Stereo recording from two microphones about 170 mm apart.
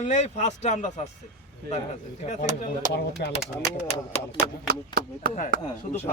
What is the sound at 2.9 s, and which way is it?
Speech, 80° left.